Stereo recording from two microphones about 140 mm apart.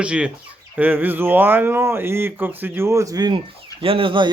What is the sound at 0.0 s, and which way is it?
Speech, 10° right (ahead or behind).